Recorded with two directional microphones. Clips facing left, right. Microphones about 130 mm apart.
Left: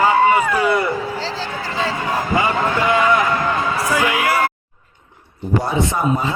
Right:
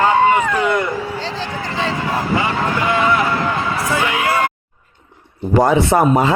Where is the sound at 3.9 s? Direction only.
25° right (ahead or behind).